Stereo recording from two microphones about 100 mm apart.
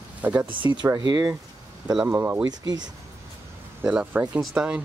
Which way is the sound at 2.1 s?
25° right (ahead or behind).